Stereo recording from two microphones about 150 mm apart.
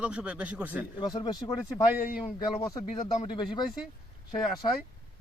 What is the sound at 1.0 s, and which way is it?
Speech, 25° left (ahead or behind).